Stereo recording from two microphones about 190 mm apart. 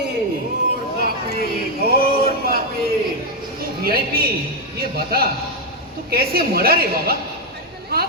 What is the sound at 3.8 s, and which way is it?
Speech, 50° right (ahead or behind).